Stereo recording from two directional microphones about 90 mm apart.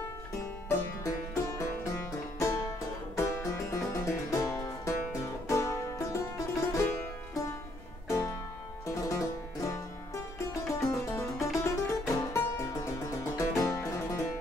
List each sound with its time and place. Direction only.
0.3 s music: 30° left (ahead or behind)
8.1 s music: 30° left (ahead or behind)